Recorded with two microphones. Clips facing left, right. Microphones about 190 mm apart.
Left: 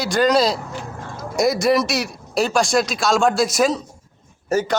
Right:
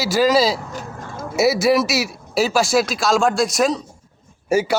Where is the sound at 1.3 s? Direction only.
5° right (ahead or behind).